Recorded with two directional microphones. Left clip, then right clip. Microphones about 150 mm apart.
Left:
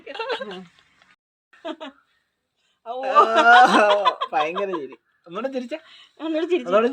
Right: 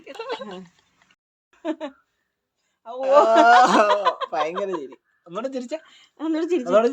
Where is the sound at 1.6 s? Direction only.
40° right (ahead or behind).